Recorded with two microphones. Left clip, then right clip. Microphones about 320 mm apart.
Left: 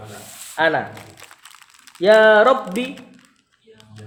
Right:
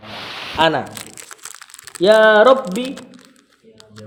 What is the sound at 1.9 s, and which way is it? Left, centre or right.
Speech, right.